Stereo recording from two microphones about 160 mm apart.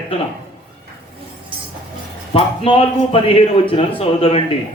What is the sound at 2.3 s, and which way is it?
A man's voice, 35° left (ahead or behind).